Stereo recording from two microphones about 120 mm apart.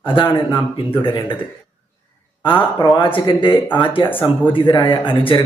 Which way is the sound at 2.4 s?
45° left (ahead or behind).